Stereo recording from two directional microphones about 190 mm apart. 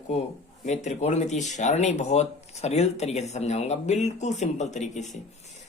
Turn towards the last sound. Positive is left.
turn(degrees=40)  # may be behind; listen again after turning